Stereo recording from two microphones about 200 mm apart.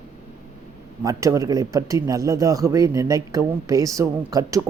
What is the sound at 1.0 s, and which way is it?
Speech, 15° right (ahead or behind).